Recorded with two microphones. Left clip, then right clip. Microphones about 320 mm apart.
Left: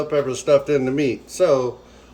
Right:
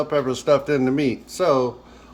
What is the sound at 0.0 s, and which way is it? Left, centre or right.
Speech, right.